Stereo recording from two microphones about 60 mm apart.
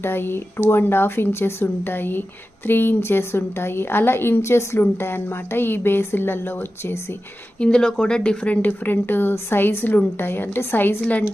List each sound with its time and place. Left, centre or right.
0.0 s a woman's voice: left
7.6 s a woman's voice: centre; by 10.9 s left